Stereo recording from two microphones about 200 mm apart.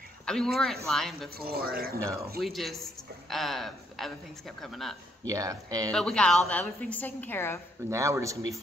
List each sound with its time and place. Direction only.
0.2 s speech: 5° left (ahead or behind)
1.4 s speech: 50° right (ahead or behind)
2.4 s speech: centre (ahead or behind)
5.2 s speech: 15° right (ahead or behind)
5.9 s a woman's voice: 5° left (ahead or behind)
7.9 s speech: 15° right (ahead or behind)